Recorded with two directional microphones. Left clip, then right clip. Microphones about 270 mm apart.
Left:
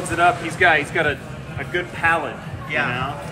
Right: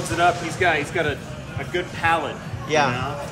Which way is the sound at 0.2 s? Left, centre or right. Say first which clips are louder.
Left 3 dB; centre.